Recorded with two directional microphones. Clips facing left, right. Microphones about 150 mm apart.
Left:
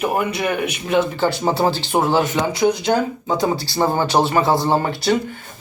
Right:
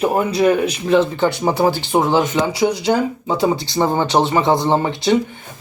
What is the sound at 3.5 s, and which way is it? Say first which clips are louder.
Speech: right 1 dB; 20° right (ahead or behind).